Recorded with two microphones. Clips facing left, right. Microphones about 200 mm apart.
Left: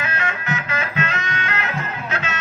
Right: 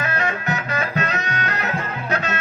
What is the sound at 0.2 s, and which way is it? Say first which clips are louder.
Music: right 2 dB; 40° right (ahead or behind).